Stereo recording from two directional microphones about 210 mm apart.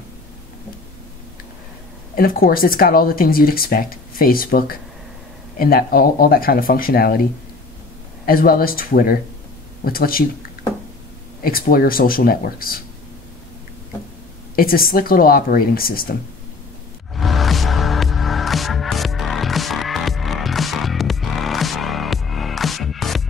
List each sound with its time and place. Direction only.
2.1 s speech: 45° left (ahead or behind)
8.3 s speech: 45° left (ahead or behind)
11.4 s speech: 45° left (ahead or behind)
14.5 s speech: 45° left (ahead or behind)
17.1 s music: centre (ahead or behind)